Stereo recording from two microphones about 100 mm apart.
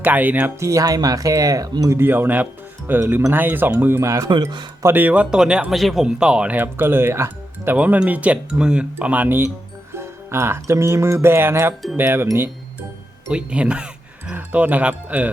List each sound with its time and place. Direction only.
0.0 s speech: 15° right (ahead or behind)
0.6 s speech: 35° right (ahead or behind)
2.0 s speech: 20° right (ahead or behind)
4.3 s speech: 50° right (ahead or behind)
4.8 s speech: 20° right (ahead or behind)
13.3 s speech: 10° right (ahead or behind)